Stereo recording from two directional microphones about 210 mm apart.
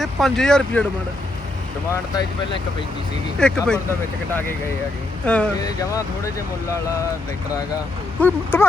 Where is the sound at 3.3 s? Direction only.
5° left (ahead or behind).